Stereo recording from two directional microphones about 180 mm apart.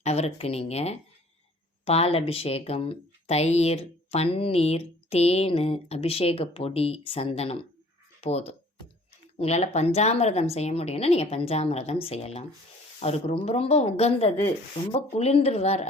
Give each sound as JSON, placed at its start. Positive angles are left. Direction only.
{"t": 0.0, "sound": "speech", "side_deg": 35}